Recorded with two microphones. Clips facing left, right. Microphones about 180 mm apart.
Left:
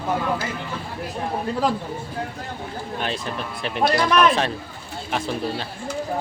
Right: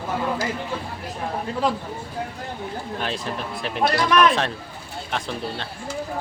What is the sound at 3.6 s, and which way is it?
Speech, centre (ahead or behind).